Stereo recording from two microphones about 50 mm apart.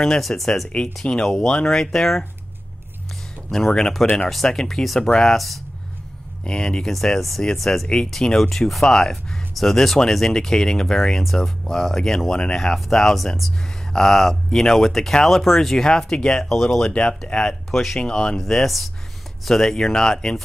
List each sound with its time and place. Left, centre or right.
0.0 s speech: centre
1.0 s speech: left
1.4 s speech: centre
3.4 s speech: centre
6.4 s speech: centre
18.0 s speech: centre
18.4 s speech: centre